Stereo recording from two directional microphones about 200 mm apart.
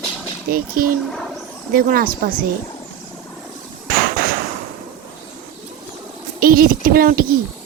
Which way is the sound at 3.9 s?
45° right (ahead or behind).